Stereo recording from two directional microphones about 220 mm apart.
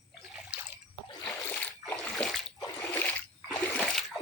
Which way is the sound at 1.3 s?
5° left (ahead or behind).